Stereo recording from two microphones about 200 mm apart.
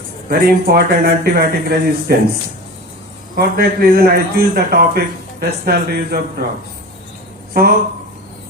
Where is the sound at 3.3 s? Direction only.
50° right (ahead or behind).